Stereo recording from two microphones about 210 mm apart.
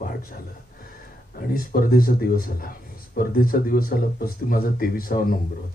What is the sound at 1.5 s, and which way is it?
Speech, 45° left (ahead or behind).